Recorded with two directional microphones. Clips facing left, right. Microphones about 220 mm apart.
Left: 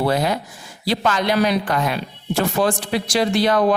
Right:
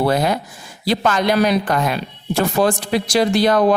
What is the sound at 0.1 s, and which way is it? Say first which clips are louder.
A woman's voice: right 2 dB; 50° right (ahead or behind).